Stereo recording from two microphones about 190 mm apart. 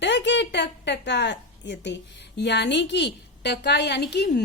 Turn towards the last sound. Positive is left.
turn(degrees=60)  # may be behind; listen again after turning